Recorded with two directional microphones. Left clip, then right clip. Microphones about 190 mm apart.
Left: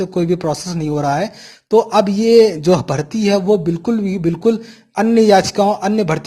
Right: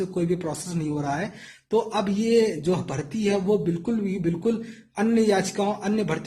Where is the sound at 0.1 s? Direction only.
40° left (ahead or behind).